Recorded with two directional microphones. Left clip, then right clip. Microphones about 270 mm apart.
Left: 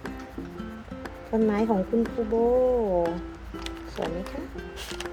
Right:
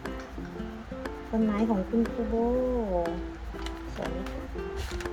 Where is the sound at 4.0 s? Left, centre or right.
Left.